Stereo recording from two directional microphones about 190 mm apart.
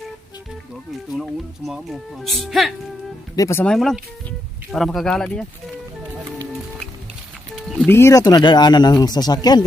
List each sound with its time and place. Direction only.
1.1 s speech: centre (ahead or behind)
3.3 s speech: 15° left (ahead or behind)
7.5 s a sound: centre (ahead or behind)
7.9 s speech: 15° left (ahead or behind)